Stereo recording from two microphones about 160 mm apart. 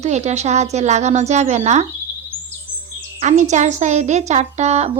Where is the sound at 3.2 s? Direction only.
50° right (ahead or behind).